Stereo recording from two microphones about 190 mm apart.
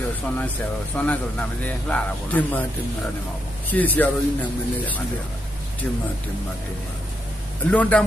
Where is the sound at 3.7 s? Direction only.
10° left (ahead or behind).